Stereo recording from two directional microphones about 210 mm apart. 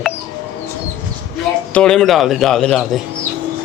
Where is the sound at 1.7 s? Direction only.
5° left (ahead or behind).